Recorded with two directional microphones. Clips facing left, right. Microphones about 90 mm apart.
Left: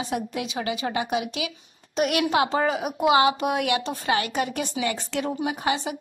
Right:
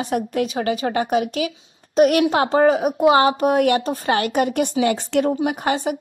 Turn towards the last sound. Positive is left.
turn(degrees=-45)  # may be behind; listen again after turning